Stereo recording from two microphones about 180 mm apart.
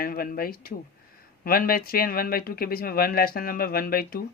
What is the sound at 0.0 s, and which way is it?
Speech, 55° left (ahead or behind).